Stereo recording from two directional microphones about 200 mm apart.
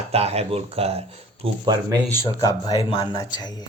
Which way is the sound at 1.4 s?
20° right (ahead or behind).